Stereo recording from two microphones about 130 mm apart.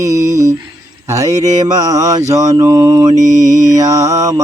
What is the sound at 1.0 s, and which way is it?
Mantra, 25° right (ahead or behind).